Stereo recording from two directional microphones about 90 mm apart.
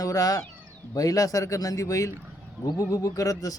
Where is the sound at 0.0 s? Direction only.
40° left (ahead or behind).